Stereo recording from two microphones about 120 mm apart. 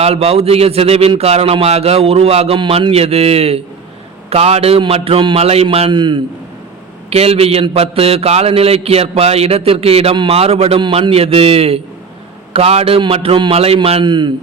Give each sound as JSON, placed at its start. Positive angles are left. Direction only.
{"t": 0.0, "sound": "a man's voice", "side_deg": -55}
{"t": 2.6, "sound": "a man's voice", "side_deg": -45}
{"t": 7.1, "sound": "a man's voice", "side_deg": -60}
{"t": 11.1, "sound": "a man's voice", "side_deg": -55}
{"t": 14.0, "sound": "a man's voice", "side_deg": -40}